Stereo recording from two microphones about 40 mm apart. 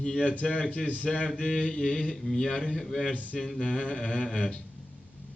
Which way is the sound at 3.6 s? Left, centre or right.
Left.